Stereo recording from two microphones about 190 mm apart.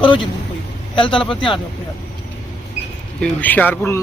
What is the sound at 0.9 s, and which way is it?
Speech, 25° left (ahead or behind).